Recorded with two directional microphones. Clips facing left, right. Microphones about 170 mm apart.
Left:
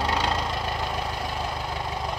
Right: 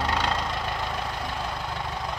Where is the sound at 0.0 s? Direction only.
5° left (ahead or behind).